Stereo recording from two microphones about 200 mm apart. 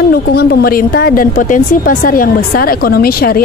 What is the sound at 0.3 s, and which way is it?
A woman's voice, 50° left (ahead or behind).